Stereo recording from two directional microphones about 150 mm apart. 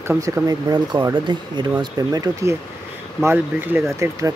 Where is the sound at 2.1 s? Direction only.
20° right (ahead or behind).